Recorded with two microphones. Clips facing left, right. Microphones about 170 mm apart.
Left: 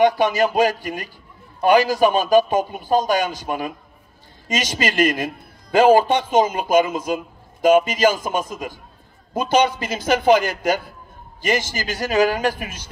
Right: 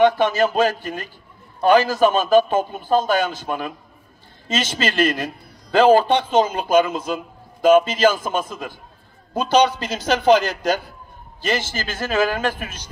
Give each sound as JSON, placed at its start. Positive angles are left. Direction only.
{"t": 0.0, "sound": "a man's voice", "side_deg": 10}
{"t": 9.5, "sound": "a man's voice", "side_deg": 50}
{"t": 9.8, "sound": "a man's voice", "side_deg": 10}